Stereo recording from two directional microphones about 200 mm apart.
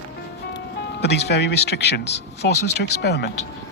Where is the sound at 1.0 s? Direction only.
60° left (ahead or behind).